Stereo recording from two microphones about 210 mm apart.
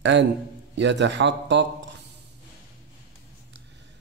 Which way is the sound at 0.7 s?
55° right (ahead or behind).